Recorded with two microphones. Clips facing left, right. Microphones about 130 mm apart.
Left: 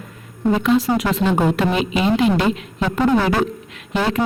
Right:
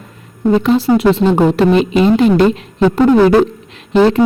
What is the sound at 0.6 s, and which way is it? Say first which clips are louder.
Speech: right 6 dB; 30° right (ahead or behind).